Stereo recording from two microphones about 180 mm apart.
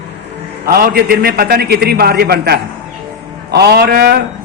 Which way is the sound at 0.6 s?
55° right (ahead or behind).